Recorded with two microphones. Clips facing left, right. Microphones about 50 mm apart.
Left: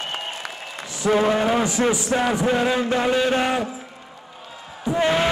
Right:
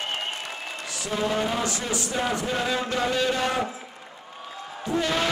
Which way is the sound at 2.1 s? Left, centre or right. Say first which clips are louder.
Left 6 dB; left.